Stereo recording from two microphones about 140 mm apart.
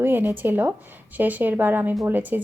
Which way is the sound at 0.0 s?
15° right (ahead or behind).